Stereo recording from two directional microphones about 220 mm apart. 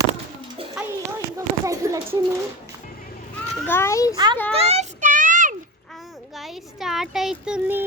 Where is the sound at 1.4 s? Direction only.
15° right (ahead or behind).